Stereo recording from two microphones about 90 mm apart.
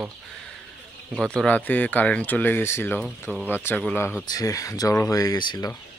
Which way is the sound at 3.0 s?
10° right (ahead or behind).